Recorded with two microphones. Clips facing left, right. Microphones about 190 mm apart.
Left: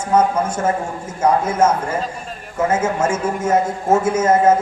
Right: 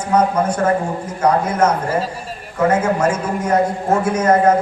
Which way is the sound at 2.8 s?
25° left (ahead or behind).